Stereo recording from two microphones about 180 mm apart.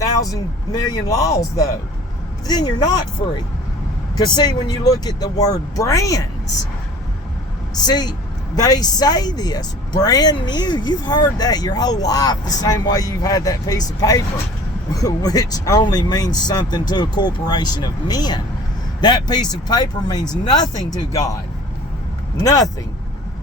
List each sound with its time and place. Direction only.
0.0 s speech: 20° left (ahead or behind)
4.1 s speech: 25° left (ahead or behind)
7.8 s speech: 20° left (ahead or behind)
22.4 s speech: 20° left (ahead or behind)